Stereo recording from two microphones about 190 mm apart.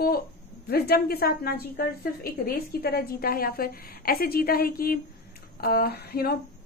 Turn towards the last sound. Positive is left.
turn(degrees=55)  # may be behind; listen again after turning